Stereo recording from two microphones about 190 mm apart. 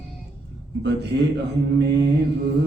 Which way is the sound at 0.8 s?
60° right (ahead or behind).